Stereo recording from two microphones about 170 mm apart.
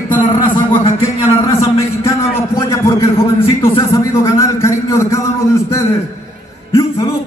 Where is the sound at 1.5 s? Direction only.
15° left (ahead or behind).